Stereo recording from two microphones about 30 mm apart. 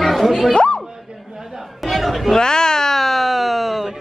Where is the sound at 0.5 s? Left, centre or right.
Left.